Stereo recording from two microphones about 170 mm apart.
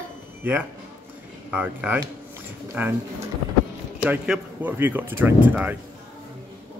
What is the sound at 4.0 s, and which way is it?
A man's voice, 5° right (ahead or behind).